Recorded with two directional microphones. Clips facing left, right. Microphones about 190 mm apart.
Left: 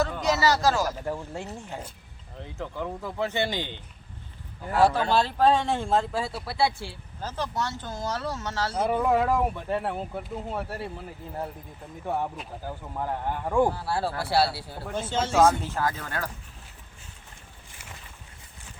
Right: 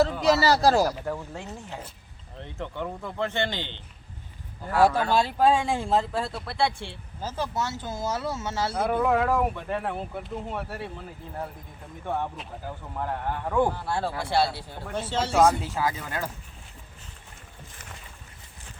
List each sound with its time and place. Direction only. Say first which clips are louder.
0.3 s speech: right 1 dB; 35° right (ahead or behind)
1.0 s speech: left 1 dB; 10° left (ahead or behind)
4.8 s speech: even; 10° right (ahead or behind)
8.9 s speech: even; 5° left (ahead or behind)
12.0 s speech: left 1 dB; 5° left (ahead or behind); by 16.3 s 10° right (ahead or behind)